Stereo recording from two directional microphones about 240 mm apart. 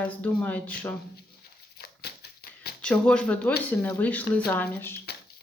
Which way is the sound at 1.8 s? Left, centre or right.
Left.